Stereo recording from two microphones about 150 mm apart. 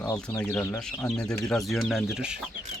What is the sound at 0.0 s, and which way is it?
Speech, 25° left (ahead or behind).